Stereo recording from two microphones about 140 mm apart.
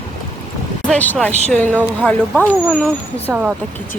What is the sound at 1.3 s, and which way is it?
Speech, 55° right (ahead or behind).